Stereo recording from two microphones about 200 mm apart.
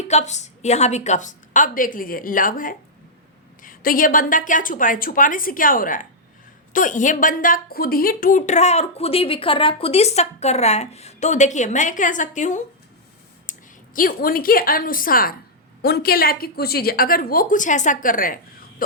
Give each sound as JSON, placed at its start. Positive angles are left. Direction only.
{"t": 0.0, "sound": "a woman's voice", "side_deg": 35}